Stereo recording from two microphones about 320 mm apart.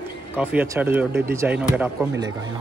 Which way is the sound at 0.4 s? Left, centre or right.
Centre.